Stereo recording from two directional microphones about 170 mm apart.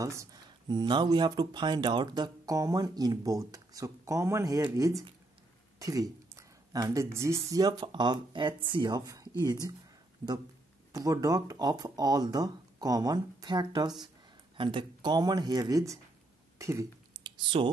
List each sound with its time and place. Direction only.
0.0 s speech: 20° right (ahead or behind)
5.8 s speech: 20° right (ahead or behind)
10.9 s speech: 20° right (ahead or behind)
16.5 s a sound: 20° right (ahead or behind)